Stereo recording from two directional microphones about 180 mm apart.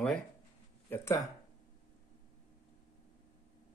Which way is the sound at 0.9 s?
15° left (ahead or behind).